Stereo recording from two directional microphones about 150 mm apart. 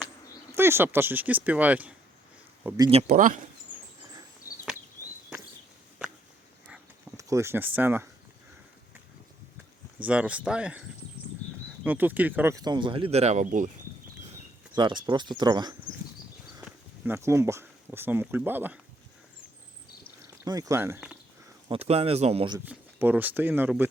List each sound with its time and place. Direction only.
0.5 s speech: 15° right (ahead or behind)
2.6 s speech: 25° right (ahead or behind)
3.1 s speech: 60° right (ahead or behind)
4.4 s a sound: 70° left (ahead or behind)
7.2 s speech: 20° right (ahead or behind)
10.0 s speech: 10° right (ahead or behind)
12.5 s speech: 30° right (ahead or behind); by 13.7 s 60° right (ahead or behind)
14.8 s speech: 30° right (ahead or behind)
16.6 s speech: 10° right (ahead or behind)
20.4 s speech: 20° right (ahead or behind)
21.7 s speech: 45° right (ahead or behind)
22.6 s speech: 10° right (ahead or behind)